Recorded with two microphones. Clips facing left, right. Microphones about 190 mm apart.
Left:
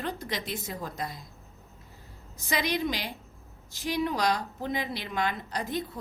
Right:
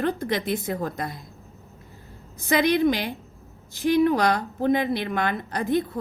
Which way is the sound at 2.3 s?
55° right (ahead or behind).